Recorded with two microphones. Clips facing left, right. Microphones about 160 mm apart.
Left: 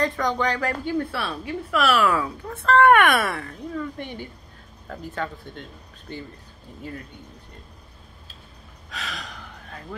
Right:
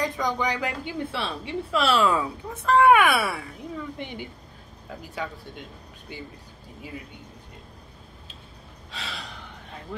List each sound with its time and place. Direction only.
0.0 s a woman's voice: 10° right (ahead or behind)
8.9 s gasp: 30° right (ahead or behind)